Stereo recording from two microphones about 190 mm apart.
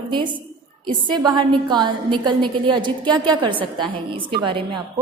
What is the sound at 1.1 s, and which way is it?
A woman's voice, 25° right (ahead or behind).